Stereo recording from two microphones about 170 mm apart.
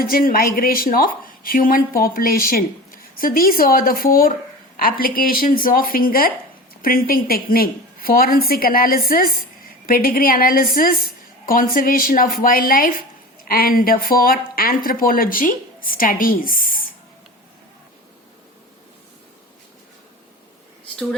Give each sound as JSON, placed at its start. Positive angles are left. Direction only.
{"t": 0.0, "sound": "a woman's voice", "side_deg": 55}